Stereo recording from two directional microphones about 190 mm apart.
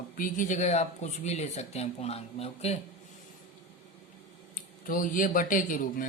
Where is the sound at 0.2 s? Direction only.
40° left (ahead or behind).